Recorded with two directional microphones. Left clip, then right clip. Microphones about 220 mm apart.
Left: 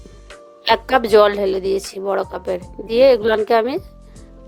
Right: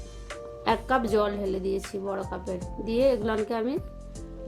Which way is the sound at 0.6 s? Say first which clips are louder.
Left 9 dB; 40° left (ahead or behind).